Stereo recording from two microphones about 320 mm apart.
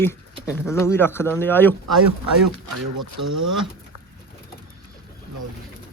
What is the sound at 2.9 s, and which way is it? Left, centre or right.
Speech, right.